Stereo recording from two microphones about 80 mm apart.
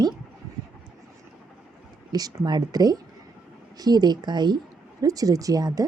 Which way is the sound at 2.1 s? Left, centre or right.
Right.